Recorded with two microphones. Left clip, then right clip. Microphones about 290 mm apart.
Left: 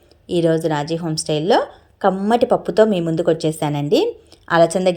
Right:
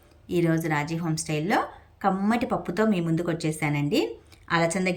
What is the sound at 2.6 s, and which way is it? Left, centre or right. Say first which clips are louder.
A woman's voice: left 11 dB; left.